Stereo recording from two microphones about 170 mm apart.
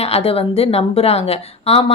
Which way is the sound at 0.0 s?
35° left (ahead or behind).